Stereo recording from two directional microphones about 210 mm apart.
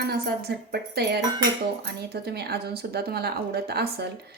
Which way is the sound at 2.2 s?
50° right (ahead or behind).